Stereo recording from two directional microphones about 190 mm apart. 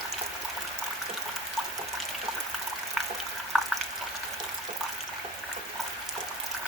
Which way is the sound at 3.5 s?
Centre (ahead or behind).